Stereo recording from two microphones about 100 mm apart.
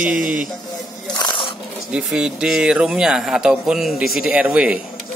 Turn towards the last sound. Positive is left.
turn(degrees=-15)  # may be behind; listen again after turning